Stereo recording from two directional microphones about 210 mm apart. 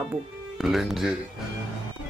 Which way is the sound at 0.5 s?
Centre (ahead or behind).